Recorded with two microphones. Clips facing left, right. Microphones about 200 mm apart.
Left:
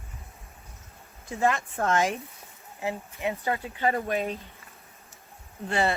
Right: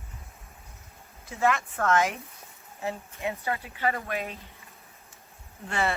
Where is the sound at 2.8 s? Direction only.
15° left (ahead or behind).